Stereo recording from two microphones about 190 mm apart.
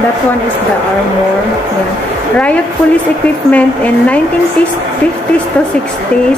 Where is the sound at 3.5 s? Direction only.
5° left (ahead or behind).